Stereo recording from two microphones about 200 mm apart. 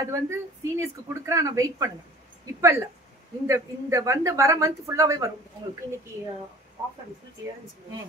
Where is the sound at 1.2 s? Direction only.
15° right (ahead or behind).